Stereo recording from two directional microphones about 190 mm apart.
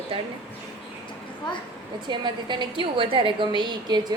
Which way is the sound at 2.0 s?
25° right (ahead or behind).